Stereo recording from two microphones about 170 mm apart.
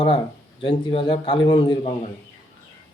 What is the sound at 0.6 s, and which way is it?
A man's voice, 30° left (ahead or behind).